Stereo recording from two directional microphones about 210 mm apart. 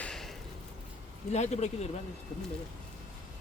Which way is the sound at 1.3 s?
30° left (ahead or behind).